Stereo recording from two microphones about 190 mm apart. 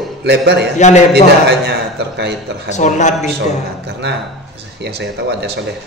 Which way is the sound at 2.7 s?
40° left (ahead or behind).